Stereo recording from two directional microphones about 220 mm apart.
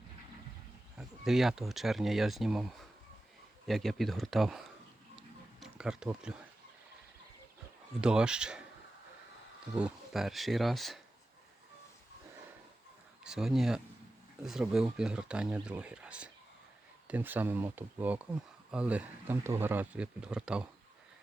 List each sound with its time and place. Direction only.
0.9 s speech: centre (ahead or behind)
3.7 s speech: centre (ahead or behind)
8.0 s speech: 5° right (ahead or behind)
9.7 s speech: 5° right (ahead or behind)
13.2 s speech: centre (ahead or behind)